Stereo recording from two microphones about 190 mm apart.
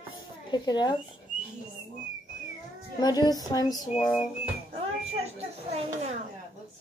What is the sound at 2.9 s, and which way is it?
Speech, 20° left (ahead or behind).